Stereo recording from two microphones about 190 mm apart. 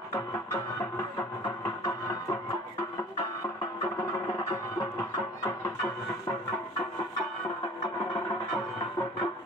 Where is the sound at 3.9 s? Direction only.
25° left (ahead or behind).